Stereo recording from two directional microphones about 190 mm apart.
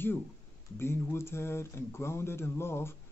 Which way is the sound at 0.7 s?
15° left (ahead or behind).